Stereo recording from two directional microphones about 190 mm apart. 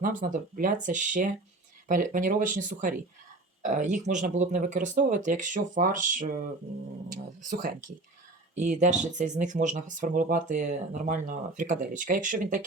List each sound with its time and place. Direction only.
0.0 s speech: 45° right (ahead or behind)
8.5 s speech: 40° right (ahead or behind)